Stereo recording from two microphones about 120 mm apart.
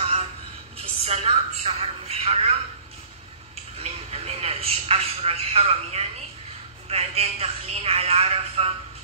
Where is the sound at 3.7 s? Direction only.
60° right (ahead or behind).